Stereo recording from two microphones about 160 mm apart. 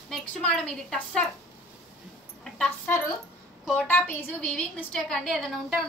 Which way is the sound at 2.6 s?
15° left (ahead or behind).